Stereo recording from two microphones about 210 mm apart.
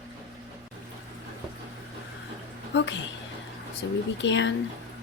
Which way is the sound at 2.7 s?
55° left (ahead or behind).